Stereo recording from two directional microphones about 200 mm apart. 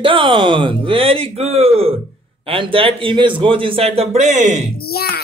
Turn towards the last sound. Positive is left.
turn(degrees=50)  # may be behind; listen again after turning